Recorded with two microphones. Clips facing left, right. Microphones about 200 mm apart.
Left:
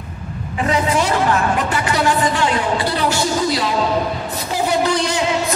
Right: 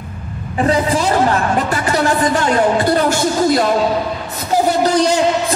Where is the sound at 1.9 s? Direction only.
45° right (ahead or behind).